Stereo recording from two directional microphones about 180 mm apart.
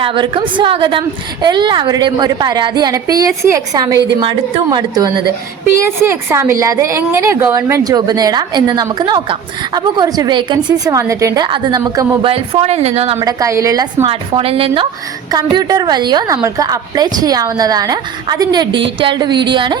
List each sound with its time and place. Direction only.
0.0 s a woman's voice: 30° right (ahead or behind)
13.1 s a woman's voice: 15° right (ahead or behind)
14.0 s a woman's voice: 30° right (ahead or behind)